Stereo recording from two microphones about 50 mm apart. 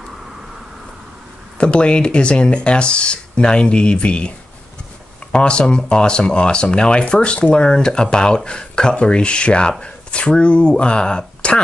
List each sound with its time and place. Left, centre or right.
1.6 s speech: left
5.3 s speech: centre